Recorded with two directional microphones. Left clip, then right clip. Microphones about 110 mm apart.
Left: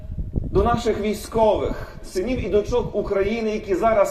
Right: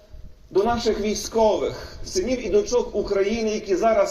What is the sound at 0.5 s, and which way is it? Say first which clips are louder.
A man's voice: left 1 dB; 30° left (ahead or behind).